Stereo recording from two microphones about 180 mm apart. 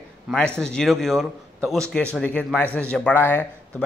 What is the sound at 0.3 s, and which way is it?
A man's voice, 5° left (ahead or behind).